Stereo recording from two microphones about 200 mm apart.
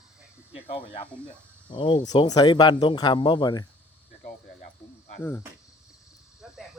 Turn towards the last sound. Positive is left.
turn(degrees=10)  # may be behind; listen again after turning